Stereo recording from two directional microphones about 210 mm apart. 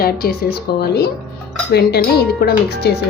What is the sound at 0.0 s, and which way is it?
Speech, 45° left (ahead or behind).